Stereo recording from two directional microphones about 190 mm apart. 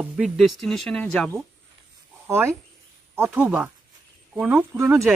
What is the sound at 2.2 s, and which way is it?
Speech, 15° right (ahead or behind).